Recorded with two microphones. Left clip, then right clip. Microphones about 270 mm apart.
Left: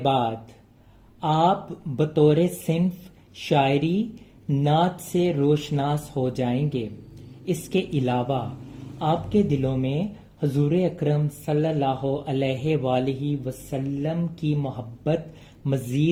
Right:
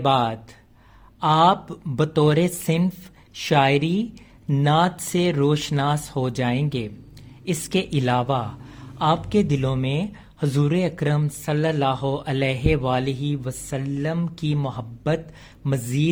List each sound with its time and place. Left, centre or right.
1.2 s speech: right